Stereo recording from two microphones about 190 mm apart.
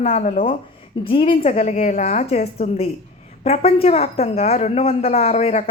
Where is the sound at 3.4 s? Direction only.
30° left (ahead or behind).